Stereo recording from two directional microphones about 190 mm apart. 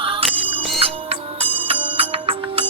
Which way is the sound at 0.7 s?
30° right (ahead or behind).